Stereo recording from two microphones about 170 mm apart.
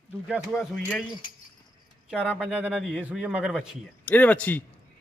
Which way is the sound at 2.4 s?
5° right (ahead or behind).